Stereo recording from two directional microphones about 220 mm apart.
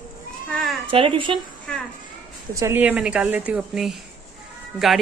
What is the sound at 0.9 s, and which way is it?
Speech, 25° right (ahead or behind).